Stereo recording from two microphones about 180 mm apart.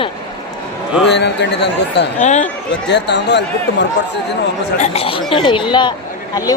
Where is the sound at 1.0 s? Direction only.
70° left (ahead or behind).